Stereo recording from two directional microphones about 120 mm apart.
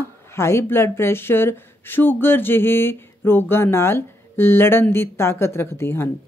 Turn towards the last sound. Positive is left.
turn(degrees=20)  # may be behind; listen again after turning